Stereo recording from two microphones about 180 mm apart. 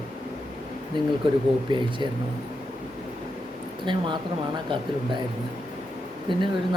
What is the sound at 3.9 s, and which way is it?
Speech, 25° right (ahead or behind).